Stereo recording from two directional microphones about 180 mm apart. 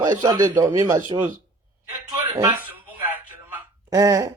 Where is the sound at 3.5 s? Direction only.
20° right (ahead or behind).